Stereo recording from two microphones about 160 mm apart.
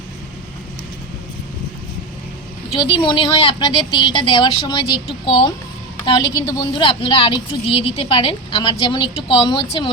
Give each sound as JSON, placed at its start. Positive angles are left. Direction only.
{"t": 2.7, "sound": "a woman's voice", "side_deg": 30}
{"t": 6.1, "sound": "a woman's voice", "side_deg": 25}